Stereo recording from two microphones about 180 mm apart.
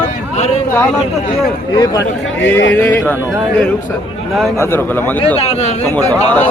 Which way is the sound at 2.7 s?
10° left (ahead or behind).